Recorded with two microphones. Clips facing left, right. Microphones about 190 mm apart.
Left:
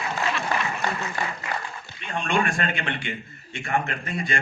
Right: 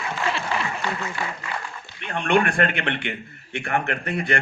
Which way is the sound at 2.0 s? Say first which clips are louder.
Right 4 dB; 60° right (ahead or behind).